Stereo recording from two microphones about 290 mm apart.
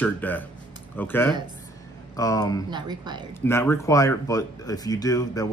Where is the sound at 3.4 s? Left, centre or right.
Centre.